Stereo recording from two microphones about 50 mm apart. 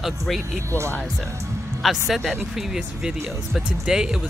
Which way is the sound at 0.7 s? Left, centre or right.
Right.